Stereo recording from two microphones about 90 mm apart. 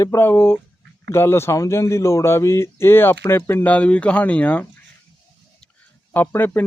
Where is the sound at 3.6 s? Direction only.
15° left (ahead or behind).